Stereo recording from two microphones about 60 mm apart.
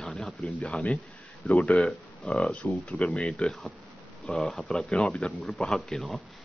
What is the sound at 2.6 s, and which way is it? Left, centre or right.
Speech, left.